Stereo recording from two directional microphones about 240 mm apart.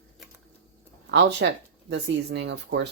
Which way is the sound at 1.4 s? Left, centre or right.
Right.